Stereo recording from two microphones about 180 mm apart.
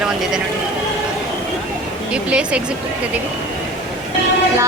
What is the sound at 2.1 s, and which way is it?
Speech, 5° right (ahead or behind).